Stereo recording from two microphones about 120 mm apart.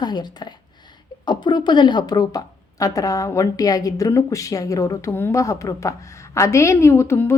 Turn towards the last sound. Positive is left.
turn(degrees=20)  # may be behind; listen again after turning